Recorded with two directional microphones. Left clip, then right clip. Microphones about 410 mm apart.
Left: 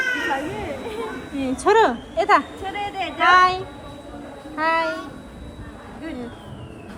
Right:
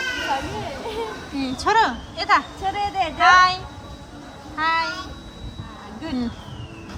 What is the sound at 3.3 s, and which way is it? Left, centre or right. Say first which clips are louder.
Speech: even; centre.